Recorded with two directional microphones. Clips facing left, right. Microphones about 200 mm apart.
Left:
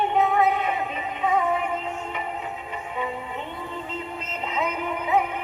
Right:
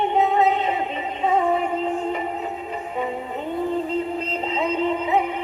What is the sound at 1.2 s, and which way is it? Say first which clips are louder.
Synthetic singing: right 3 dB; 30° right (ahead or behind).